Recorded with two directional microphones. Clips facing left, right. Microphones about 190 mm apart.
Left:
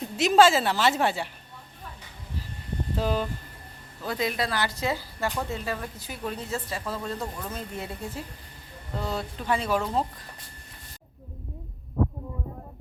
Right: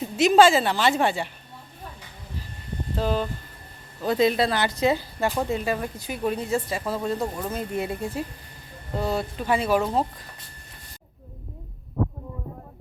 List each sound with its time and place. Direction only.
0.0 s a woman's voice: centre (ahead or behind)
2.9 s speech: 5° left (ahead or behind)
4.0 s speech: 25° right (ahead or behind)
7.2 s speech: 25° right (ahead or behind)
7.5 s speech: 15° right (ahead or behind)
12.0 s heart sounds: centre (ahead or behind)